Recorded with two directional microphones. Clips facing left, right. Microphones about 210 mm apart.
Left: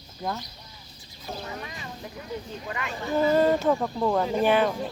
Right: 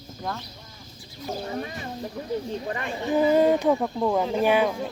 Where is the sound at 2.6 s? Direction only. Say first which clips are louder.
Right 4 dB; 35° right (ahead or behind).